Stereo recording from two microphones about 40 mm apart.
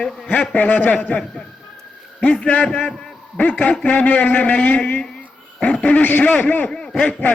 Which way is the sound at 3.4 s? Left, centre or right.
Left.